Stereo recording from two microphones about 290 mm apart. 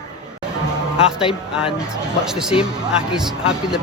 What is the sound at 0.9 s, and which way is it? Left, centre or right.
Speech, centre.